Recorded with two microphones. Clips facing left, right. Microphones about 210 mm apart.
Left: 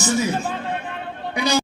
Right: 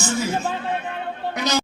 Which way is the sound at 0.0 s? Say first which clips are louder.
Left 3 dB; 15° left (ahead or behind).